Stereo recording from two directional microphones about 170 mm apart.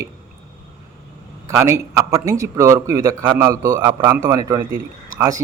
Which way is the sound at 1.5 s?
15° right (ahead or behind).